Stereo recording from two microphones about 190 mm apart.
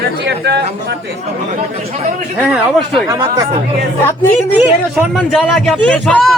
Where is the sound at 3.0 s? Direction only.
15° right (ahead or behind).